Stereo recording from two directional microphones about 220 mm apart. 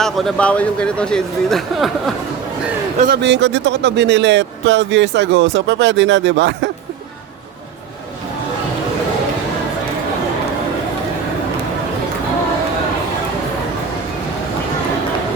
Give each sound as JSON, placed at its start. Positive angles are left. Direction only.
{"t": 0.0, "sound": "speech", "side_deg": 0}
{"t": 3.0, "sound": "a man's voice", "side_deg": -50}